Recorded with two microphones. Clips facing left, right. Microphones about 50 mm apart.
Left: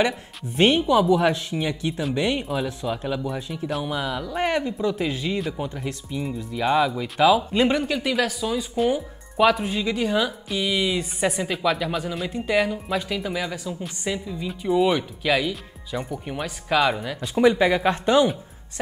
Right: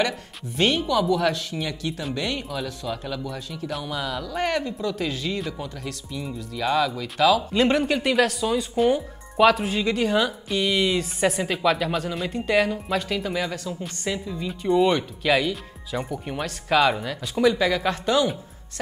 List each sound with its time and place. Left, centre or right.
0.0 s speech: left
7.6 s speech: centre
17.2 s speech: left